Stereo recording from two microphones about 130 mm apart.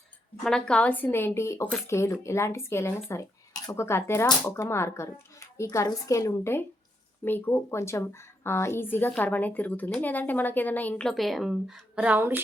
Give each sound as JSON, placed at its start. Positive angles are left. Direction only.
{"t": 0.4, "sound": "a woman's voice", "side_deg": 5}